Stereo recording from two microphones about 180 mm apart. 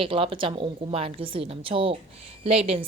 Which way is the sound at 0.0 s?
30° right (ahead or behind).